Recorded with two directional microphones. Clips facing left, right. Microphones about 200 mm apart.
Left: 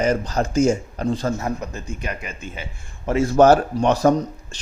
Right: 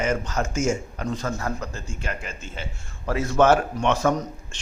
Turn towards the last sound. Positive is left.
turn(degrees=35)  # may be behind; listen again after turning